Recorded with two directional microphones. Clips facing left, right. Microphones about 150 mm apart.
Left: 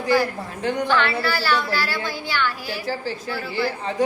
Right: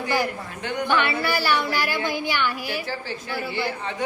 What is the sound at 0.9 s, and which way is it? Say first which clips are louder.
A woman's voice: right 2 dB; 15° right (ahead or behind).